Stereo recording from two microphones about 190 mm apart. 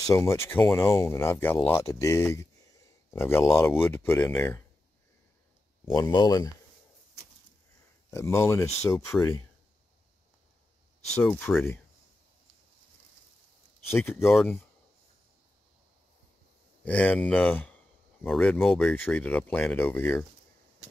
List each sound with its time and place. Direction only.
0.0 s speech: 15° left (ahead or behind)
5.9 s speech: 20° left (ahead or behind)
8.1 s speech: 15° left (ahead or behind)
11.1 s speech: 10° left (ahead or behind)
13.9 s speech: 10° left (ahead or behind)
14.3 s speech: centre (ahead or behind)
16.8 s speech: 5° left (ahead or behind)